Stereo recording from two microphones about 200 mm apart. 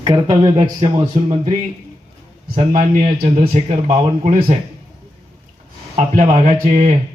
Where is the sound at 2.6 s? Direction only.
35° right (ahead or behind).